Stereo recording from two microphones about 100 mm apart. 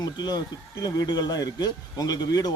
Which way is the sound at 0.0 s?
45° left (ahead or behind).